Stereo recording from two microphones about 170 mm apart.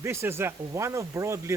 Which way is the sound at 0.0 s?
15° right (ahead or behind).